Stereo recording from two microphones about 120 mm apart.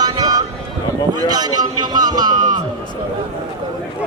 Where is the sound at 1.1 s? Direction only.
35° right (ahead or behind).